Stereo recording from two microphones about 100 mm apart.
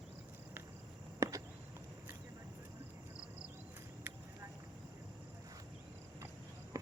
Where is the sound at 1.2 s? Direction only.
30° right (ahead or behind).